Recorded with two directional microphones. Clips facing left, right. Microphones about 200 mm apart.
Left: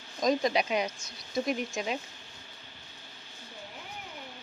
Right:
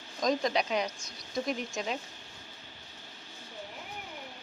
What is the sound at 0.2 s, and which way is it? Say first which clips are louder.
Speech: left 2 dB; 5° left (ahead or behind).